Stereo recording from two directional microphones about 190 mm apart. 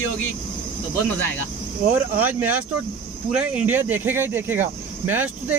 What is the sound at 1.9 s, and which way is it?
Speech, 10° right (ahead or behind).